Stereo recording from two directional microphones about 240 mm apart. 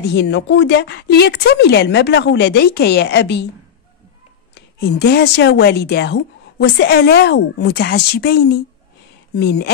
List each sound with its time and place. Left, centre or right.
0.0 s speech: left
4.6 s speech: left